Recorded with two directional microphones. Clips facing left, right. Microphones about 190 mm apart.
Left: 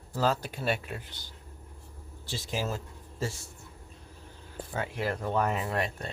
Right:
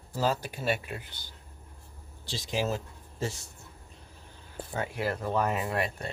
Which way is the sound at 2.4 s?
15° right (ahead or behind).